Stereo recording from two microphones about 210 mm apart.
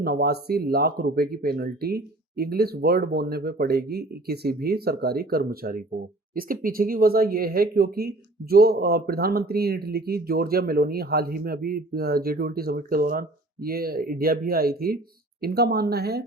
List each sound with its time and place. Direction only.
0.0 s speech: 50° right (ahead or behind)